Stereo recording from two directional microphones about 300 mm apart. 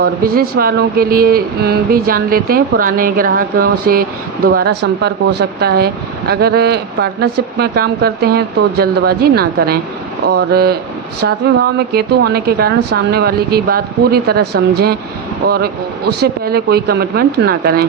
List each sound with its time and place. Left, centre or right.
0.0 s speech: right
11.9 s speech: right